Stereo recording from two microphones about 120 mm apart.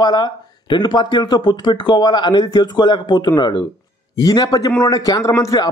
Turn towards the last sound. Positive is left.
turn(degrees=30)  # may be behind; listen again after turning